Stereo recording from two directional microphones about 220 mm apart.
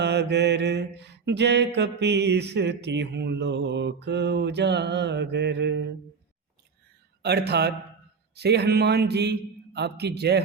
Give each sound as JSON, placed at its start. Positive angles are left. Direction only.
{"t": 0.0, "sound": "mantra", "side_deg": -50}
{"t": 7.2, "sound": "mantra", "side_deg": -50}